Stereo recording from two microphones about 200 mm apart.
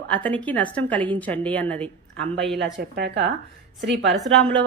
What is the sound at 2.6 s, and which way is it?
A woman's voice, 65° right (ahead or behind).